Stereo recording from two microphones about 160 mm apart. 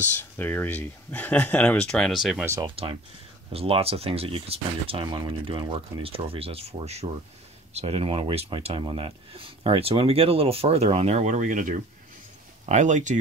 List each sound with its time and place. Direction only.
0.2 s speech: 10° left (ahead or behind)
2.6 s speech: 35° right (ahead or behind); by 13.2 s 50° right (ahead or behind)